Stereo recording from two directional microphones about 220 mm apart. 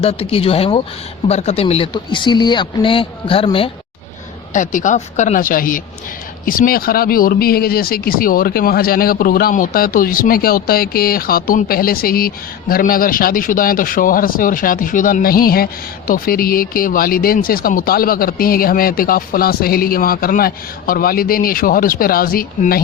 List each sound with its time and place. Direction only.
0.0 s a man's voice: 25° left (ahead or behind)
4.5 s speech: 35° left (ahead or behind)